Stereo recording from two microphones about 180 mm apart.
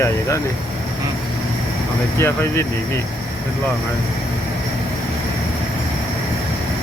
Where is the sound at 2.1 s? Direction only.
15° left (ahead or behind).